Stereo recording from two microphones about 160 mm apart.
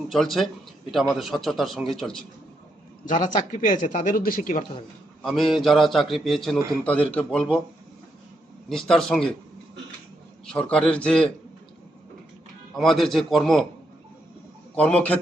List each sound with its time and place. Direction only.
0.1 s a man's voice: centre (ahead or behind)
3.5 s speech: 55° left (ahead or behind)
5.2 s a man's voice: centre (ahead or behind)
8.7 s a man's voice: 5° left (ahead or behind)
10.4 s a man's voice: 5° left (ahead or behind)
12.7 s a man's voice: centre (ahead or behind)
14.8 s a man's voice: 10° left (ahead or behind)